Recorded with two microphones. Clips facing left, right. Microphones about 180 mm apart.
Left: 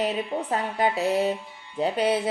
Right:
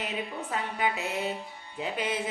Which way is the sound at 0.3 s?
40° left (ahead or behind).